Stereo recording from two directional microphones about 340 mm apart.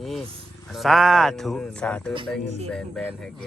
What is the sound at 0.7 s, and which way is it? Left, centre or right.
Speech, centre.